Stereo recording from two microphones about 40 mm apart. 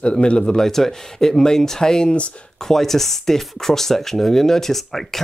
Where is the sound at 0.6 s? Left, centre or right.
Centre.